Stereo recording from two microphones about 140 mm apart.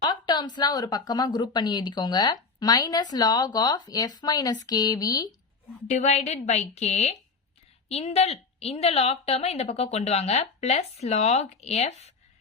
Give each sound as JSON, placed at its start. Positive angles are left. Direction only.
{"t": 0.0, "sound": "speech", "side_deg": 30}
{"t": 5.9, "sound": "a woman's voice", "side_deg": 55}